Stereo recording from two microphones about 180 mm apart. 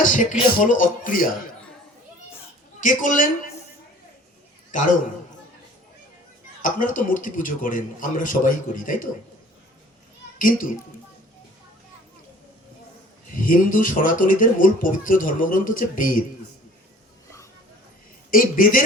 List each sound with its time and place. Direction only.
0.0 s speech: 45° left (ahead or behind)
2.8 s speech: 50° left (ahead or behind)
4.7 s a man's voice: 45° left (ahead or behind)
6.6 s speech: 45° left (ahead or behind)
10.3 s a woman's voice: 50° left (ahead or behind)
13.3 s speech: 50° left (ahead or behind)
18.3 s speech: 50° left (ahead or behind)